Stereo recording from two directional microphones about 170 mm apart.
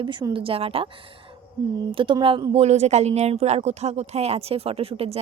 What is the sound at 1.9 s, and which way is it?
A woman's voice, 30° right (ahead or behind).